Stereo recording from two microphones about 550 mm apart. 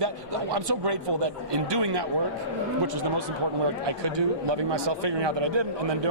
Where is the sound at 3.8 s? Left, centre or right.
Right.